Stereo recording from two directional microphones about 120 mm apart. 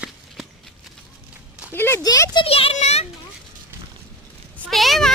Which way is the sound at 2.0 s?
30° left (ahead or behind).